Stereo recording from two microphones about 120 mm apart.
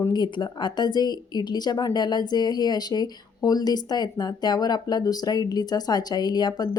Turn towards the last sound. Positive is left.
turn(degrees=35)  # may be behind; listen again after turning